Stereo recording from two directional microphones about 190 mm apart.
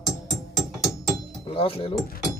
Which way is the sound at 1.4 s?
30° left (ahead or behind).